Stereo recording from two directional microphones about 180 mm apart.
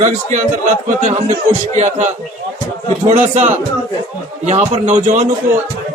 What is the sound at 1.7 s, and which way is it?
Speech, 40° right (ahead or behind).